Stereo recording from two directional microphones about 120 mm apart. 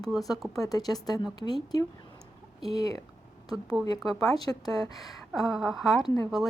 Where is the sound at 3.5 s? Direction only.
Centre (ahead or behind).